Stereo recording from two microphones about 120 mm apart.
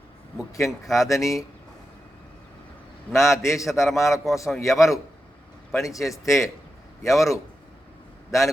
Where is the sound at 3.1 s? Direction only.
25° left (ahead or behind).